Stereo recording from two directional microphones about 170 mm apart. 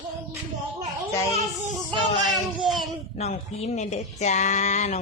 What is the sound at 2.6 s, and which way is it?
Child singing, centre (ahead or behind).